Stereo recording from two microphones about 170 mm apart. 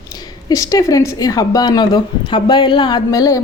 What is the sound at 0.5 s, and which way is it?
A woman's voice, 20° left (ahead or behind).